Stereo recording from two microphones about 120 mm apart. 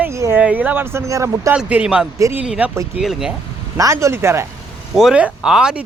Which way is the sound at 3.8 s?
25° right (ahead or behind).